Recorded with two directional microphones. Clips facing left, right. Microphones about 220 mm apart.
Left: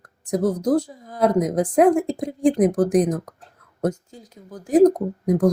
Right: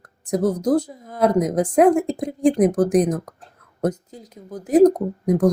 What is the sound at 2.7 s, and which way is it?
Speech, 20° right (ahead or behind).